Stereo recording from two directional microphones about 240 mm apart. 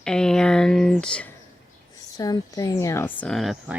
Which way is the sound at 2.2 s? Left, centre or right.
Centre.